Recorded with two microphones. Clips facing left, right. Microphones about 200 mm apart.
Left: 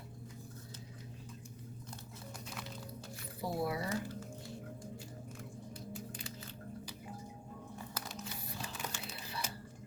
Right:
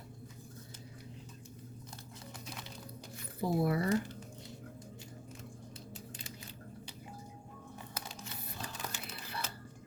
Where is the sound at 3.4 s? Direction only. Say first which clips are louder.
Right 5 dB; 55° right (ahead or behind).